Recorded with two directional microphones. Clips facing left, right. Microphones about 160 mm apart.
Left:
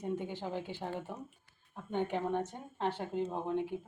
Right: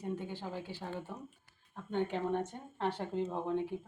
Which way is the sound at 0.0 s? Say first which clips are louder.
Left 2 dB; 15° left (ahead or behind).